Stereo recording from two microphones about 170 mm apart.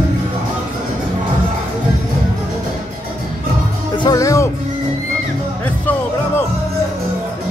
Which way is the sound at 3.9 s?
20° left (ahead or behind).